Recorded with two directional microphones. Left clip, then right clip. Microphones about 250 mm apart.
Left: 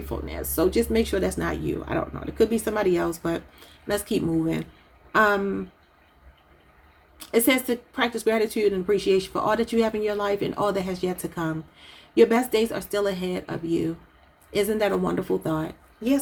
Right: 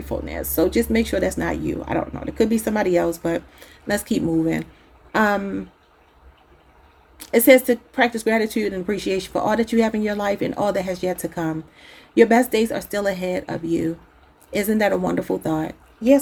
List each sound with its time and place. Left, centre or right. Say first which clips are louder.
0.3 s a woman's voice: right 3 dB; right
7.2 s a woman's voice: right 8 dB; right